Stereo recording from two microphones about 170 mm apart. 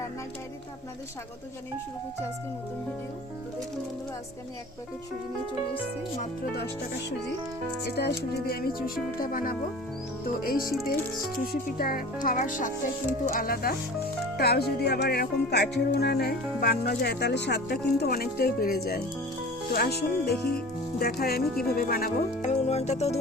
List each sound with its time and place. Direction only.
7.9 s speech: 70° left (ahead or behind)
11.8 s speech: 60° left (ahead or behind)
22.4 s music: 40° left (ahead or behind)